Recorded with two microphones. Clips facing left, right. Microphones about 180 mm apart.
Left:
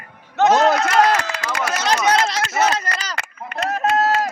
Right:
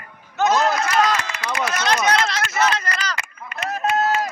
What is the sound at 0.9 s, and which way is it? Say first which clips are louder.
Run: left 3 dB; 50° left (ahead or behind).